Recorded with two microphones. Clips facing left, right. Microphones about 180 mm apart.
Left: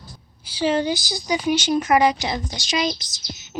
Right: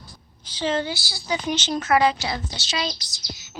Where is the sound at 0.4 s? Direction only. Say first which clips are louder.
Left 4 dB; 10° left (ahead or behind).